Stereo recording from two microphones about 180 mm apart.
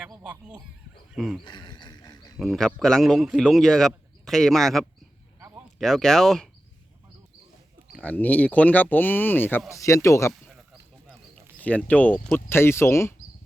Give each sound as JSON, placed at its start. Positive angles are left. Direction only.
{"t": 1.1, "sound": "speech", "side_deg": 0}
{"t": 1.5, "sound": "a sound", "side_deg": 25}
{"t": 2.4, "sound": "a man's voice", "side_deg": 0}
{"t": 7.9, "sound": "speech", "side_deg": 10}
{"t": 11.6, "sound": "speech", "side_deg": 10}